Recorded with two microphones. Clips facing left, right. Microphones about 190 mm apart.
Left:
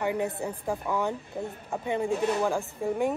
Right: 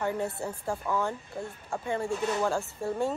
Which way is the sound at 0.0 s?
15° left (ahead or behind).